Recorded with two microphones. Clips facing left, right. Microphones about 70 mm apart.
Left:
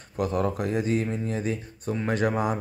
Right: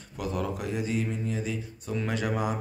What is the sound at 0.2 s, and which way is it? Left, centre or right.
Speech, left.